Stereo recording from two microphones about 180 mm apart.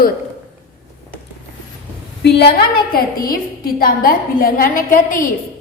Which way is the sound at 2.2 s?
65° left (ahead or behind).